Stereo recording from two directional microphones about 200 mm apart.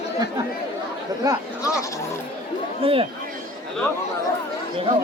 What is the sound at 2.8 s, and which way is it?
Speech, 30° right (ahead or behind).